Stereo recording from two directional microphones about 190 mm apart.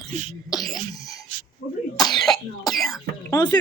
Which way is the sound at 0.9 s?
20° left (ahead or behind).